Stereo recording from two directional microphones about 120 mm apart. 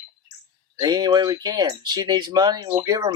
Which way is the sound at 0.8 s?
35° right (ahead or behind).